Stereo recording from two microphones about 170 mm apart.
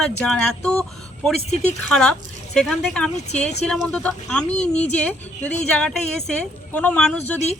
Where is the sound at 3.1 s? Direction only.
40° left (ahead or behind).